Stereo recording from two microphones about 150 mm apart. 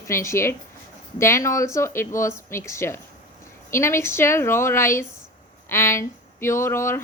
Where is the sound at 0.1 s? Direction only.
20° left (ahead or behind).